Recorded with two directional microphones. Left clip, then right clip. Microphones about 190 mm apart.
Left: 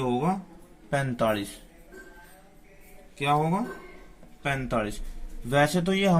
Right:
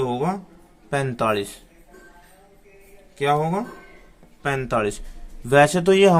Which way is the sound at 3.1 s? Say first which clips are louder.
Right 4 dB; 25° right (ahead or behind).